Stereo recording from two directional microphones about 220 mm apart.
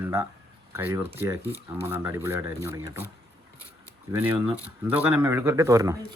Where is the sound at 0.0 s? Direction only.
15° right (ahead or behind).